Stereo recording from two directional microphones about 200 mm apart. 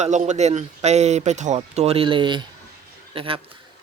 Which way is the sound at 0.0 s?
35° right (ahead or behind).